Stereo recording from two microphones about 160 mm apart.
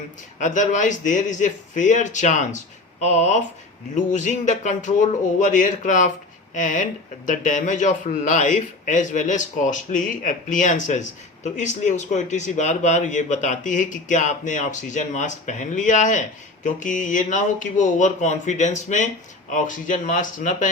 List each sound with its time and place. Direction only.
0.3 s a man's voice: 50° left (ahead or behind)